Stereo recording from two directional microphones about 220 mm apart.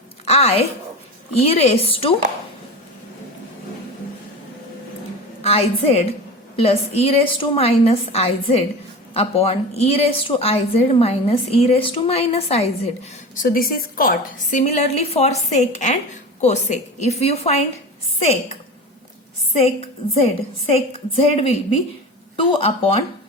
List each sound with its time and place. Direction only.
0.3 s a woman's voice: 30° left (ahead or behind)
5.4 s a woman's voice: 25° left (ahead or behind)
19.5 s a woman's voice: 30° left (ahead or behind)
22.5 s a woman's voice: 25° left (ahead or behind)